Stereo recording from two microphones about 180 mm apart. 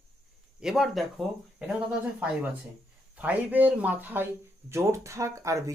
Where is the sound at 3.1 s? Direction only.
10° right (ahead or behind).